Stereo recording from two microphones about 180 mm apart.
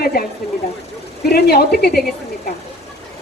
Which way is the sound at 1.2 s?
60° left (ahead or behind).